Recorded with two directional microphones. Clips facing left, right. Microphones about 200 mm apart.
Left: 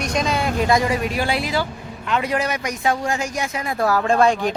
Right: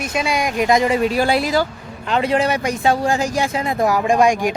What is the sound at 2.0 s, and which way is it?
Speech, 30° right (ahead or behind).